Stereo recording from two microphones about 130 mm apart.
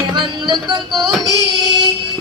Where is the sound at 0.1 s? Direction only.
35° right (ahead or behind).